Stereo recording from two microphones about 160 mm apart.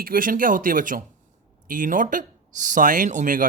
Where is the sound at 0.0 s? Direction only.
60° right (ahead or behind).